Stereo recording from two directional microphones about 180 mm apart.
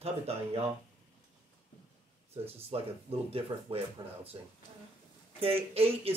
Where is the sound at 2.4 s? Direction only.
30° right (ahead or behind).